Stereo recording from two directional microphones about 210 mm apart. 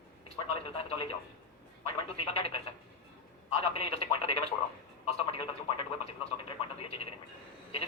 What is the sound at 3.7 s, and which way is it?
Speech, 30° left (ahead or behind).